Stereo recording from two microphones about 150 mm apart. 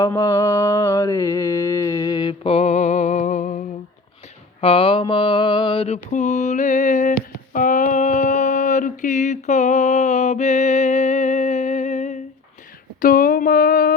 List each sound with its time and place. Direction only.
0.0 s mantra: 20° left (ahead or behind); by 3.6 s 55° left (ahead or behind)
4.6 s mantra: 40° left (ahead or behind)
13.0 s a sound: 70° left (ahead or behind)